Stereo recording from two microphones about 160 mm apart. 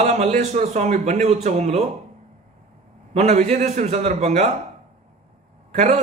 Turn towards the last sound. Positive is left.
turn(degrees=-45)  # may be behind; listen again after turning